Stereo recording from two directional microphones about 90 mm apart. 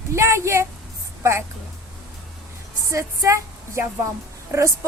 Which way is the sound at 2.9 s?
35° right (ahead or behind).